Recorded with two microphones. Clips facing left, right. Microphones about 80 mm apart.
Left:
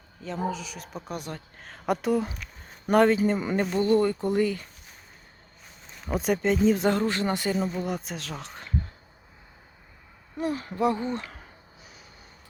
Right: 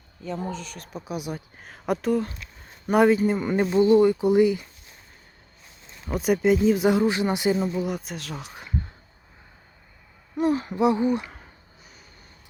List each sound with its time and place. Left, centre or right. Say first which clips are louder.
0.2 s speech: left 1 dB; centre
6.1 s speech: right 4 dB; centre
7.5 s speech: right 3 dB; centre
10.3 s speech: right 6 dB; right; by 11.4 s centre